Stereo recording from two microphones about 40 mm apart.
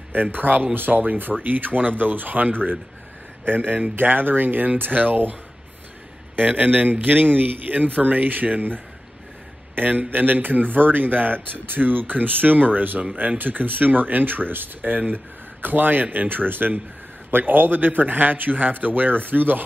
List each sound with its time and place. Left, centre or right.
0.1 s speech: right
6.3 s speech: right
9.8 s speech: right